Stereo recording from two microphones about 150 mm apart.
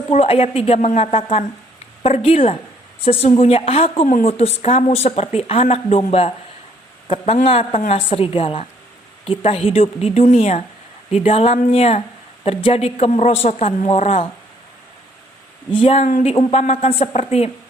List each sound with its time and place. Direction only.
0.1 s a woman's voice: 45° left (ahead or behind)
7.4 s a woman's voice: 40° left (ahead or behind)
15.8 s a woman's voice: 45° left (ahead or behind)